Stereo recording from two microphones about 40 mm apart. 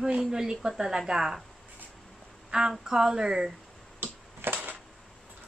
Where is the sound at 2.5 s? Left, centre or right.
Right.